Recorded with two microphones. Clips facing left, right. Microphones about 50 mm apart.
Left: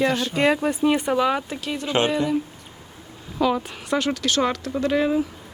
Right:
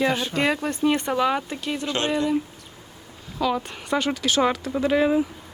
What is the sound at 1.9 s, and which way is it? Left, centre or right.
Speech, centre.